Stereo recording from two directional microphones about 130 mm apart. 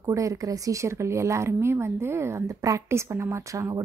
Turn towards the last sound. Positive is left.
turn(degrees=-20)  # may be behind; listen again after turning